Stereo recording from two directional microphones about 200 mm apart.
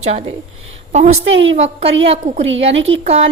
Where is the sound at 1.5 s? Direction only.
35° right (ahead or behind).